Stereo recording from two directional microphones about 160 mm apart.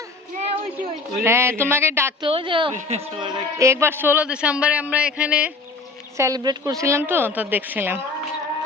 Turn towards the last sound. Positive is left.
turn(degrees=-10)  # may be behind; listen again after turning